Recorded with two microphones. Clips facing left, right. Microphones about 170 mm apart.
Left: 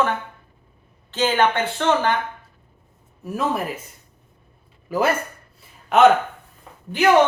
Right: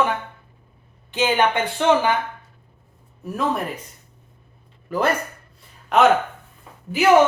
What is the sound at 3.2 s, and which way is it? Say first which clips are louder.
Speech: even; centre (ahead or behind).